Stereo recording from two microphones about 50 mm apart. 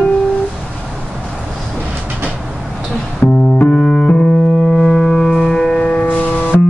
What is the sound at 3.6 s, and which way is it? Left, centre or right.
Music, left.